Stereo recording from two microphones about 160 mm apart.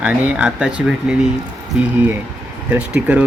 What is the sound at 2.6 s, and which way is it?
Speech, 10° right (ahead or behind).